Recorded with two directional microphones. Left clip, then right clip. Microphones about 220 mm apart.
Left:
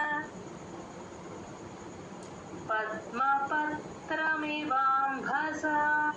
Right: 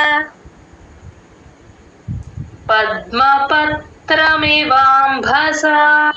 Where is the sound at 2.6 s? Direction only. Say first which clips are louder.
Right 18 dB; 50° right (ahead or behind).